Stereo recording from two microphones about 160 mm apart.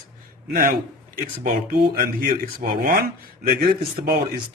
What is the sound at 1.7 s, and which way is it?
Speech, 70° right (ahead or behind).